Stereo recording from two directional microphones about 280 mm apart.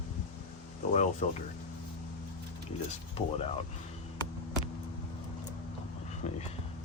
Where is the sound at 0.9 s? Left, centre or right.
Left.